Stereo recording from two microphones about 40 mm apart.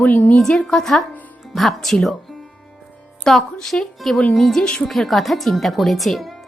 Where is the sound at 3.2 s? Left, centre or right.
Centre.